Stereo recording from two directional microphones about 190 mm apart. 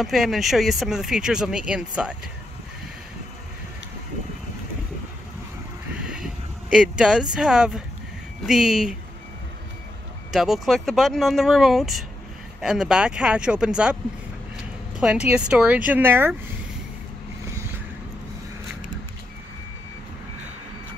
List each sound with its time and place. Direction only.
0.0 s speech: centre (ahead or behind)
5.9 s a sound: 5° right (ahead or behind)
7.0 s speech: 5° right (ahead or behind)
10.3 s speech: centre (ahead or behind)
15.0 s speech: 5° right (ahead or behind)